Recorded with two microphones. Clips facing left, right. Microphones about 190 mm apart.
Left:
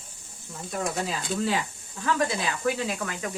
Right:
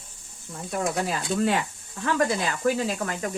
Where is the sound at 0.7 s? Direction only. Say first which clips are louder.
Right 3 dB; 60° right (ahead or behind).